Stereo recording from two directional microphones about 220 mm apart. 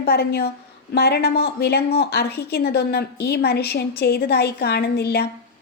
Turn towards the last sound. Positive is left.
turn(degrees=45)  # may be behind; listen again after turning